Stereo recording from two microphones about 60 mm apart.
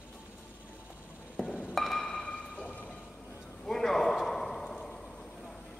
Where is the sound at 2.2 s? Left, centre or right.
Left.